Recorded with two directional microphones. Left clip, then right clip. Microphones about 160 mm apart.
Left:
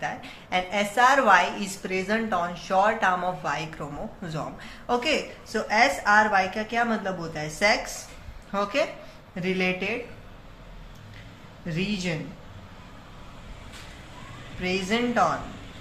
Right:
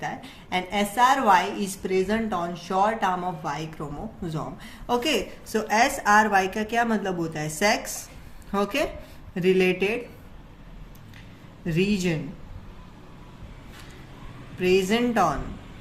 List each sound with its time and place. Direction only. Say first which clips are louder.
0.0 s a woman's voice: left 1 dB; 30° right (ahead or behind)
4.9 s a woman's voice: even; 45° right (ahead or behind)
11.6 s a woman's voice: right 5 dB; 55° right (ahead or behind)
14.6 s a woman's voice: right 5 dB; 55° right (ahead or behind)